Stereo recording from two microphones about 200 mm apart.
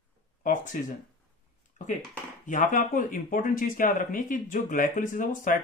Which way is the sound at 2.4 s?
40° left (ahead or behind).